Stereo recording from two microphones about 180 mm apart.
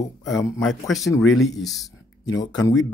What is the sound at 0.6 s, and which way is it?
Speech, centre (ahead or behind).